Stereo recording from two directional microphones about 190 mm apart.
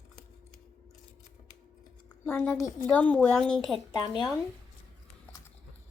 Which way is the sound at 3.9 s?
25° left (ahead or behind).